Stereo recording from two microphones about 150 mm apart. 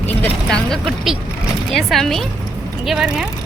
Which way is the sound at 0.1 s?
10° left (ahead or behind).